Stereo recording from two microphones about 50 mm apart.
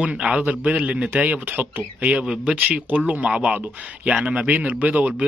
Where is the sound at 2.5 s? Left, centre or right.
Right.